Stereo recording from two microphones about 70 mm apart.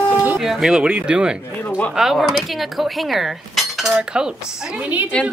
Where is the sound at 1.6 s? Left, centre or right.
Left.